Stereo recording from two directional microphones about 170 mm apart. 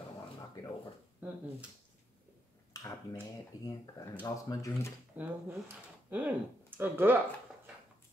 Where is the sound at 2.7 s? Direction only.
20° left (ahead or behind).